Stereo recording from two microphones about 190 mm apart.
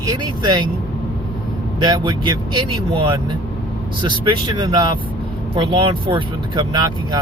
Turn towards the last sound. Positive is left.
turn(degrees=-20)  # may be behind; listen again after turning